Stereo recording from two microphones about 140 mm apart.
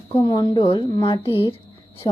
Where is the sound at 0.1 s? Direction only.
30° left (ahead or behind).